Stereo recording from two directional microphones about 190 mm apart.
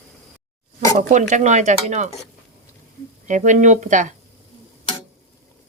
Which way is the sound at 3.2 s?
40° right (ahead or behind).